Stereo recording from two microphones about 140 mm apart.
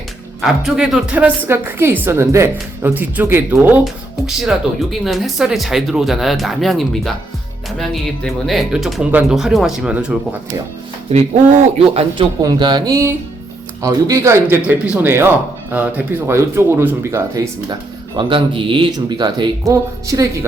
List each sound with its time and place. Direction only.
0.4 s speech: 5° right (ahead or behind)
4.4 s speech: centre (ahead or behind)
11.1 s speech: 50° right (ahead or behind)
12.4 s speech: 30° right (ahead or behind)
18.2 s speech: 35° right (ahead or behind)